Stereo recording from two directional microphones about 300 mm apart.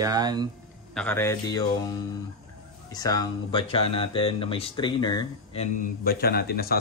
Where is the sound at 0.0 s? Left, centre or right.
Centre.